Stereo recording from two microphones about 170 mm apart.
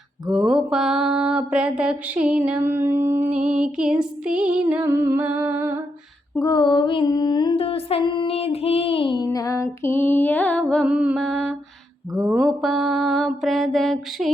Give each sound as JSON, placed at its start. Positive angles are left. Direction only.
{"t": 0.3, "sound": "mantra", "side_deg": -5}
{"t": 6.3, "sound": "mantra", "side_deg": 20}
{"t": 10.8, "sound": "music", "side_deg": -5}
{"t": 12.4, "sound": "mantra", "side_deg": 0}